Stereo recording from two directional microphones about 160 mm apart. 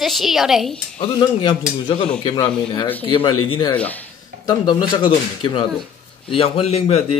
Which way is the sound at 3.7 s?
10° left (ahead or behind).